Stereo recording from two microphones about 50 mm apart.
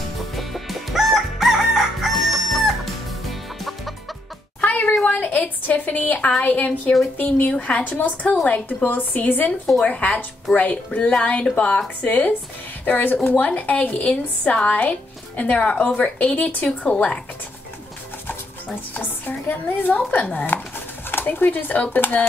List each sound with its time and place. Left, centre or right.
0.4 s crowing: centre
4.6 s a sound: left
5.9 s a woman's voice: left
18.9 s a woman's voice: left